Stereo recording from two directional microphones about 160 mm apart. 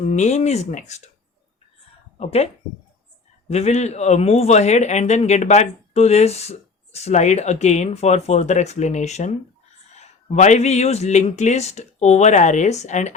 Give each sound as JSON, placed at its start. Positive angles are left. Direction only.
{"t": 0.0, "sound": "speech", "side_deg": 50}
{"t": 2.1, "sound": "speech", "side_deg": 40}
{"t": 3.5, "sound": "speech", "side_deg": 45}